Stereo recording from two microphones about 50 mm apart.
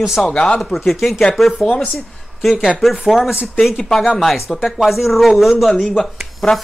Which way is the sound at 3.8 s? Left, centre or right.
Centre.